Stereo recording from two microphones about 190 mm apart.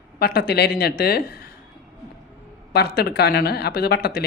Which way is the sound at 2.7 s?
55° left (ahead or behind).